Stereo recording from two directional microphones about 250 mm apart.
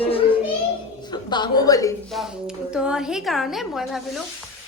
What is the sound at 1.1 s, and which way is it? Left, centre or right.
Speech, centre.